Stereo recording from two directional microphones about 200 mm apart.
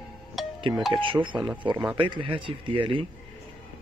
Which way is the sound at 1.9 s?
25° right (ahead or behind).